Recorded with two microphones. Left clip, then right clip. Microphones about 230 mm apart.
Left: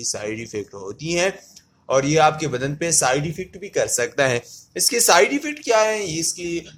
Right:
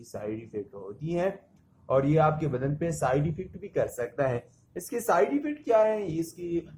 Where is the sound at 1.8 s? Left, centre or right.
Left.